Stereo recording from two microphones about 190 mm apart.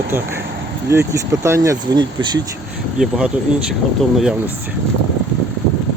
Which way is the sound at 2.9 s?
5° right (ahead or behind).